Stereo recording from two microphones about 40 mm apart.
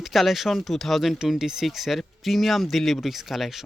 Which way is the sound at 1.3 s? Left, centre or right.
Centre.